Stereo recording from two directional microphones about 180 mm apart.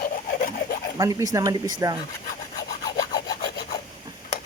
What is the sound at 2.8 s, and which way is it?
Rub, 20° left (ahead or behind).